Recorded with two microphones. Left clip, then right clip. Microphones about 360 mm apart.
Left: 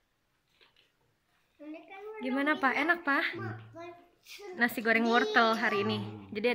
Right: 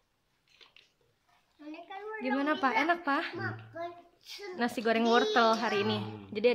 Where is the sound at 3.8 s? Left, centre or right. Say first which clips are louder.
Right 6 dB; right.